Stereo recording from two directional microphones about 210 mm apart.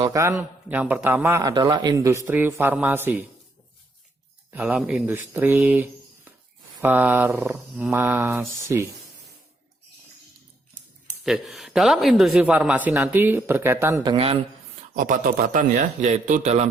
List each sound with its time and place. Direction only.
0.0 s a man's voice: 15° right (ahead or behind)
4.5 s a man's voice: 5° right (ahead or behind)
11.2 s speech: centre (ahead or behind); by 14.3 s 25° right (ahead or behind)
14.9 s speech: 40° right (ahead or behind)